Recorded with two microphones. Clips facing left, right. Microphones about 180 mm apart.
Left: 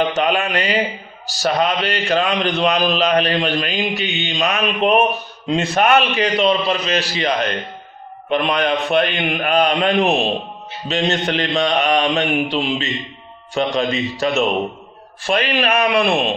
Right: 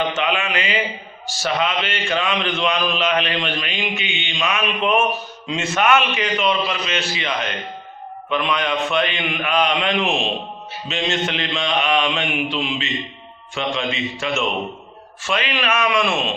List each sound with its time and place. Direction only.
0.2 s a man's voice: 40° left (ahead or behind)
15.6 s a man's voice: 35° left (ahead or behind)